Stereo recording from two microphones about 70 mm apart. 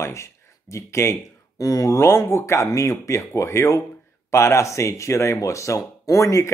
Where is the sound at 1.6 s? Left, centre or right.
Left.